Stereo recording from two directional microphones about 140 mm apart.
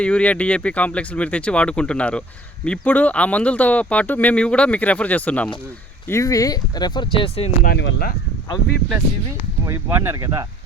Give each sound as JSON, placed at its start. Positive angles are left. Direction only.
{"t": 0.0, "sound": "speech", "side_deg": 10}
{"t": 6.1, "sound": "speech", "side_deg": 20}
{"t": 7.6, "sound": "speech", "side_deg": 90}
{"t": 9.6, "sound": "speech", "side_deg": -20}